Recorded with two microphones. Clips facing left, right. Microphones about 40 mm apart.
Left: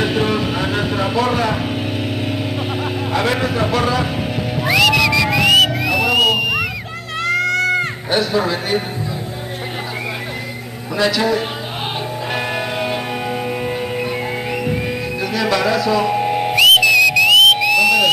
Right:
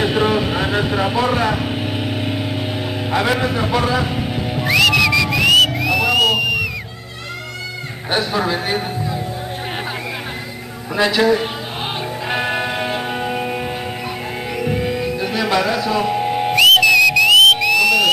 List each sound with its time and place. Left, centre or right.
0.0 s vehicle: centre
3.1 s a man's voice: centre
4.4 s music: centre
7.2 s goat: left
8.1 s a man's voice: centre
11.0 s a man's voice: right
12.3 s music: centre
15.4 s speech: centre
16.1 s whistle: centre